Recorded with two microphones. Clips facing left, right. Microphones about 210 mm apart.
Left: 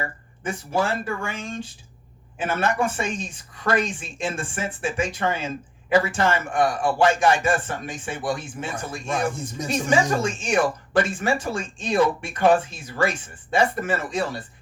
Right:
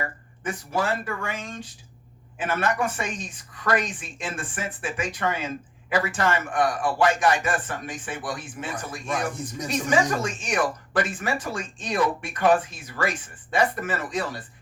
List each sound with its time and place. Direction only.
0.0 s a woman's voice: 25° left (ahead or behind)